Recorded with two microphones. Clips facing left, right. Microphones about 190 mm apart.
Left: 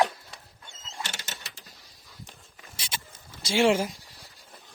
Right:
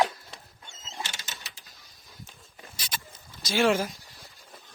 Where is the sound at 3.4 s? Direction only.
30° left (ahead or behind).